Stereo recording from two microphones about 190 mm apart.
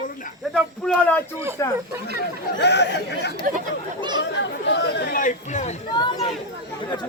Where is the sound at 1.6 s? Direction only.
15° left (ahead or behind).